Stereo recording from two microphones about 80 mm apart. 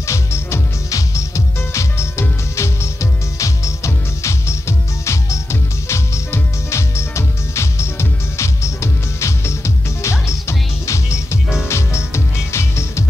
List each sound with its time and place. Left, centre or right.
0.0 s music: left